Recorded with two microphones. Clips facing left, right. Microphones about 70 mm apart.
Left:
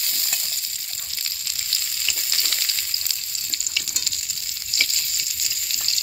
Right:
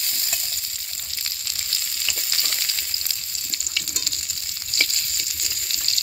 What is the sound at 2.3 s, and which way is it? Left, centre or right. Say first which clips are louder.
Frying: even; centre.